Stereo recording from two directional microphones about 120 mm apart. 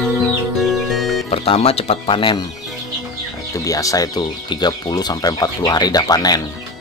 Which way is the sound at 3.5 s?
30° left (ahead or behind).